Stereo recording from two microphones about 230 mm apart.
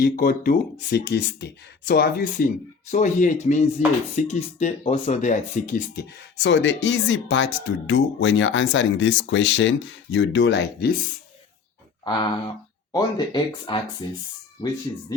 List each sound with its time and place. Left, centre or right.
0.0 s speech: left
6.4 s speech: left
12.9 s speech: centre